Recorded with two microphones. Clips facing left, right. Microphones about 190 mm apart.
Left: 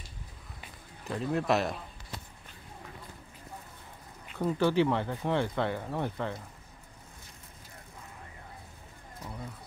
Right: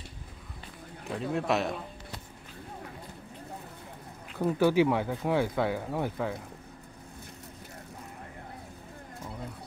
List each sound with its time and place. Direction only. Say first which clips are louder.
1.0 s speech: even; centre (ahead or behind)
4.3 s speech: right 2 dB; 10° right (ahead or behind)